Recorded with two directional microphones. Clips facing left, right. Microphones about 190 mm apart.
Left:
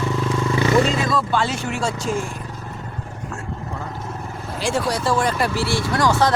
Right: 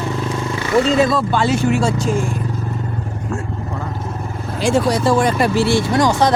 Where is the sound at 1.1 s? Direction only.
30° right (ahead or behind).